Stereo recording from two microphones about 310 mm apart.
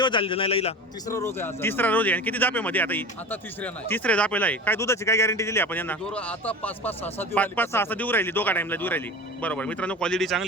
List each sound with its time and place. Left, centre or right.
0.0 s a man's voice: centre